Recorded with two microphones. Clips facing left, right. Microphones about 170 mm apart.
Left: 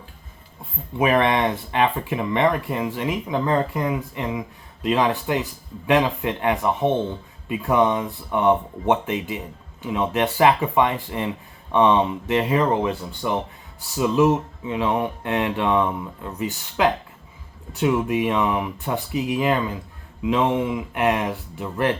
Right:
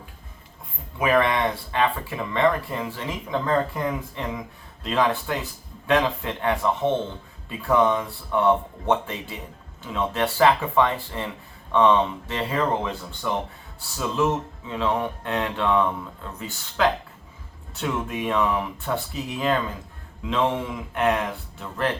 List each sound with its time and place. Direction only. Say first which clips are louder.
0.9 s speech: left 2 dB; 25° left (ahead or behind)